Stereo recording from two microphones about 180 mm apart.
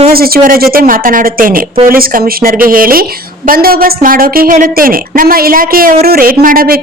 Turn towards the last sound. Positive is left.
turn(degrees=-55)  # may be behind; listen again after turning